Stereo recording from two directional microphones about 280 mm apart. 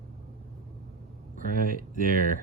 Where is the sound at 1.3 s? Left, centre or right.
Right.